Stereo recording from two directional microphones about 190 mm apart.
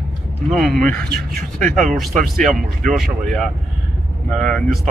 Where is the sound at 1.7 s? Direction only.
45° right (ahead or behind).